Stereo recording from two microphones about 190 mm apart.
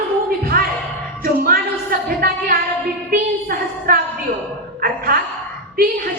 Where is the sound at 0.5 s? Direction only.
50° right (ahead or behind).